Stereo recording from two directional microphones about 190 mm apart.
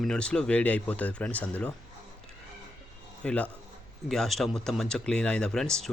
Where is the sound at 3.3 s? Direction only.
5° left (ahead or behind).